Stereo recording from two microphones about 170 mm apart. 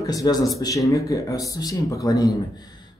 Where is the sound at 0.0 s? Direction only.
20° left (ahead or behind).